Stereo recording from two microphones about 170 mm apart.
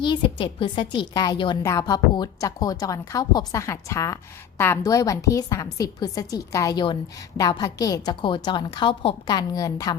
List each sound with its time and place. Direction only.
0.0 s a woman's voice: 30° left (ahead or behind)